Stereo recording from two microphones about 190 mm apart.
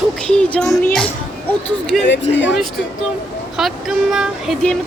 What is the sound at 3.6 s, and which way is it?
Speech, centre (ahead or behind).